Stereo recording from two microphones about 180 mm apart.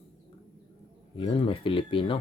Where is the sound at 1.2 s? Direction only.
30° left (ahead or behind).